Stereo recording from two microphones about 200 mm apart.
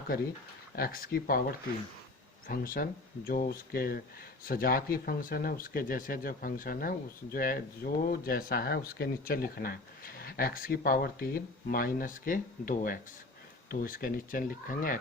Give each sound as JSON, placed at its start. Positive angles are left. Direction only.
{"t": 0.8, "sound": "speech", "side_deg": 45}